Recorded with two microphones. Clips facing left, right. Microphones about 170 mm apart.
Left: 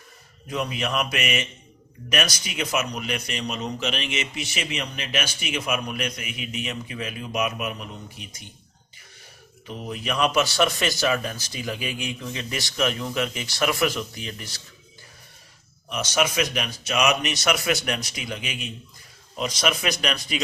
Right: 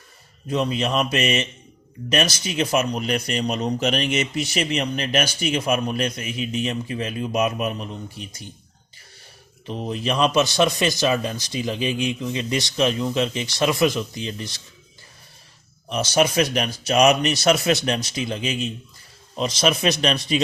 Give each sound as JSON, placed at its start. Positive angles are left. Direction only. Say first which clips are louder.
{"t": 0.4, "sound": "a man's voice", "louder": "right 5 dB", "side_deg": -30}
{"t": 9.6, "sound": "a man's voice", "louder": "right 5 dB", "side_deg": -30}
{"t": 15.9, "sound": "a man's voice", "louder": "right 5 dB", "side_deg": -30}